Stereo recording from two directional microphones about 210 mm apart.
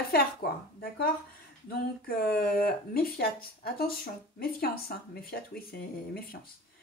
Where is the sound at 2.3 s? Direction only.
45° left (ahead or behind).